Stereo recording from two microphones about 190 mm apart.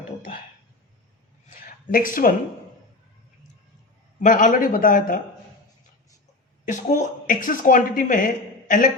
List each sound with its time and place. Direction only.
1.6 s speech: 45° left (ahead or behind)
4.2 s speech: 40° left (ahead or behind)
6.7 s speech: 40° left (ahead or behind)